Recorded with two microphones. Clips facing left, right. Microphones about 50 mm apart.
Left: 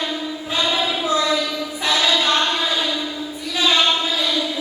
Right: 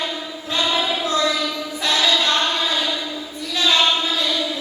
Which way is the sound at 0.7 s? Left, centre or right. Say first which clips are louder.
Left 1 dB; centre.